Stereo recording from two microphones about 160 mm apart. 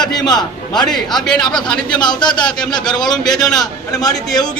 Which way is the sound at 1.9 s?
25° left (ahead or behind).